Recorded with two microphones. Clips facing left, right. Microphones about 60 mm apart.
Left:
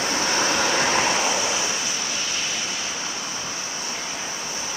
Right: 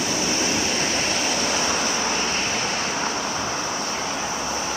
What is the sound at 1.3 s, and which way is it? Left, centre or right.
Vehicle, right.